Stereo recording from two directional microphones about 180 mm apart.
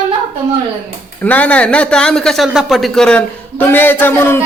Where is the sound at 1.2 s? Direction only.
10° left (ahead or behind).